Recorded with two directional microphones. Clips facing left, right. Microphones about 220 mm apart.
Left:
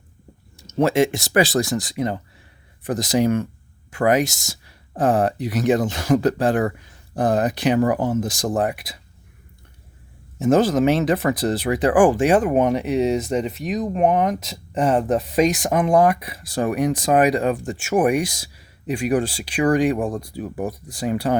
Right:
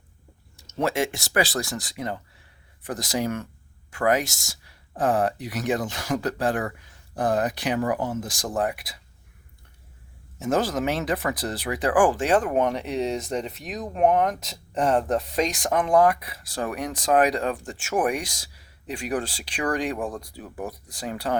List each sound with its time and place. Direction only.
0.5 s speech: 20° left (ahead or behind)
10.4 s speech: 20° left (ahead or behind)